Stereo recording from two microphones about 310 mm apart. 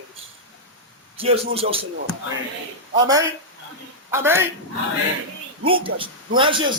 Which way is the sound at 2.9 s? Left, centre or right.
Centre.